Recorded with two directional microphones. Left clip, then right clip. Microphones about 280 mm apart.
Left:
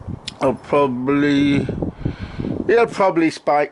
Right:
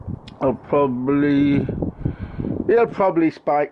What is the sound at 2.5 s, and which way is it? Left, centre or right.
Speech, centre.